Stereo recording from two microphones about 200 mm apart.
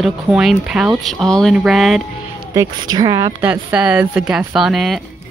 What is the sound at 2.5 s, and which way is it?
Speech, 20° right (ahead or behind).